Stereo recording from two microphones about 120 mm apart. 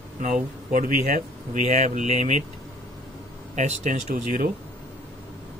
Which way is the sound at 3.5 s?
85° right.